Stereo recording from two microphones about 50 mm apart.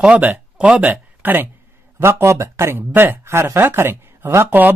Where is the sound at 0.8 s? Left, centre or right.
Right.